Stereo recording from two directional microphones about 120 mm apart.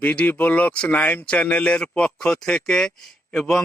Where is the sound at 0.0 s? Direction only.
10° left (ahead or behind).